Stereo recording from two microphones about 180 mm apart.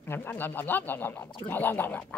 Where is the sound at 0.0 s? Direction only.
10° left (ahead or behind).